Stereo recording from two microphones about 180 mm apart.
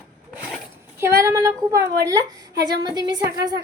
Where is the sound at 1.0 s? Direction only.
15° right (ahead or behind).